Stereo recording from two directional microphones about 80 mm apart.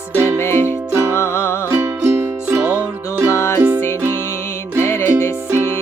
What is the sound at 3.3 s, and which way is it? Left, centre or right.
Music, left.